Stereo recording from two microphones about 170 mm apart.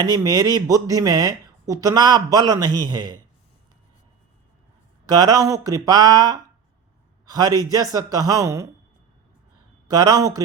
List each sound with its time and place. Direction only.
0.0 s speech: 20° right (ahead or behind)
5.0 s speech: 25° right (ahead or behind)
9.9 s speech: 20° right (ahead or behind)